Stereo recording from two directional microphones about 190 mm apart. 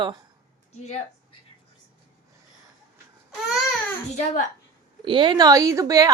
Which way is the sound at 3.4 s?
Centre (ahead or behind).